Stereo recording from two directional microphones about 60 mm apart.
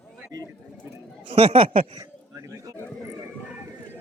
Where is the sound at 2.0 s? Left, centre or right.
Right.